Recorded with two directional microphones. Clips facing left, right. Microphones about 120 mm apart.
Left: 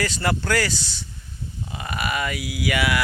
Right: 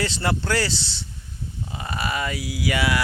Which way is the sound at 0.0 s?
25° right (ahead or behind).